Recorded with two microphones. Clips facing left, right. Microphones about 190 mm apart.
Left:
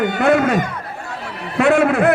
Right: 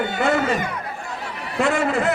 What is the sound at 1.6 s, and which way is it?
Speech, 60° left (ahead or behind).